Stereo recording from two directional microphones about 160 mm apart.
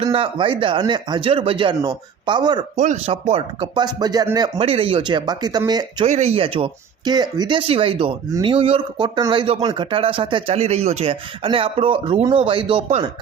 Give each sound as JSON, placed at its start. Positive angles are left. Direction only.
{"t": 0.0, "sound": "speech", "side_deg": -35}
{"t": 2.7, "sound": "speech", "side_deg": -45}
{"t": 4.5, "sound": "speech", "side_deg": -35}
{"t": 6.1, "sound": "speech", "side_deg": -45}